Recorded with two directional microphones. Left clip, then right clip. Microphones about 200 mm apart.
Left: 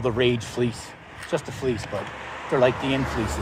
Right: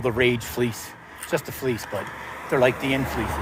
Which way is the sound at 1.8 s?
40° right (ahead or behind).